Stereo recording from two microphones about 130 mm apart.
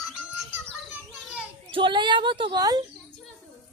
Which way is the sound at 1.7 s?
40° right (ahead or behind).